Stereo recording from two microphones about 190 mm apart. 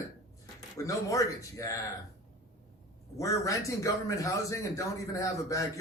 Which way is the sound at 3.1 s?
15° left (ahead or behind).